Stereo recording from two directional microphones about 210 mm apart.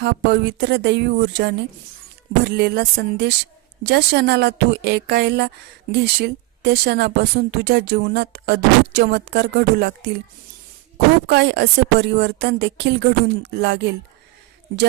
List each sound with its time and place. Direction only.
0.0 s speech: 55° right (ahead or behind)